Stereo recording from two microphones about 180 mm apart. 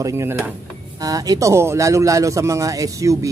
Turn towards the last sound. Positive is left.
turn(degrees=-20)  # may be behind; listen again after turning